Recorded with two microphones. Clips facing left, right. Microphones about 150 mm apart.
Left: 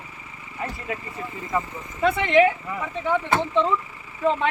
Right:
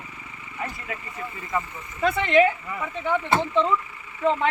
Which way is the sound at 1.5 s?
5° left (ahead or behind).